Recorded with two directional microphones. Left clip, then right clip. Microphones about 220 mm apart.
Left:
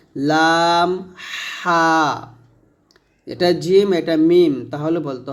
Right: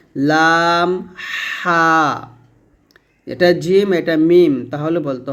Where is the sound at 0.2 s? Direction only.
15° right (ahead or behind).